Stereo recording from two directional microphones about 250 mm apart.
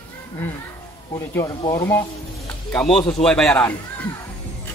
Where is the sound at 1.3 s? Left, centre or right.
Centre.